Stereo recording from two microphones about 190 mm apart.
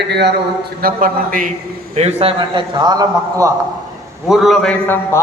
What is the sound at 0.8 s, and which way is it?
Speech, 45° right (ahead or behind).